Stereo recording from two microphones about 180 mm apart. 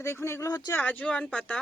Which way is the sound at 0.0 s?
15° left (ahead or behind).